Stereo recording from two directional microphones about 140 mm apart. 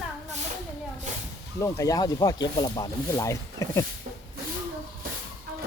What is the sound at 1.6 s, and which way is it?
Speech, 25° left (ahead or behind).